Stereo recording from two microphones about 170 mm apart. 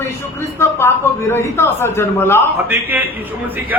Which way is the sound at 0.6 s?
15° left (ahead or behind).